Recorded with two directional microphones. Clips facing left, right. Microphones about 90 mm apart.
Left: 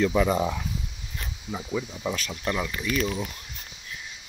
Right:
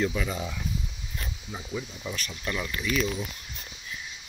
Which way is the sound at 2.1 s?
90° left.